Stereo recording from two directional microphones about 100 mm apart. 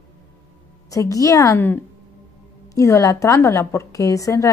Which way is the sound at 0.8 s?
35° left (ahead or behind).